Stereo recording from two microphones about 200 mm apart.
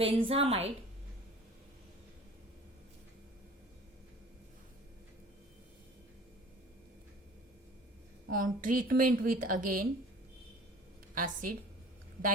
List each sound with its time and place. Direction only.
0.0 s a woman's voice: 30° right (ahead or behind)
8.3 s a woman's voice: 45° right (ahead or behind)
11.1 s speech: 45° right (ahead or behind)